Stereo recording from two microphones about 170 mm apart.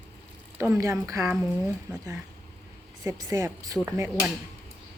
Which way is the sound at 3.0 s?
20° right (ahead or behind).